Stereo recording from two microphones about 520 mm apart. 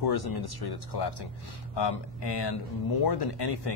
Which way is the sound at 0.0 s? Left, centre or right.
Left.